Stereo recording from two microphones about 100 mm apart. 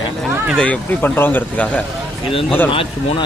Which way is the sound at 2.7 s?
65° left (ahead or behind).